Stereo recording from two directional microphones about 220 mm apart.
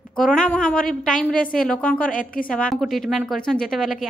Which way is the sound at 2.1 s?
40° left (ahead or behind).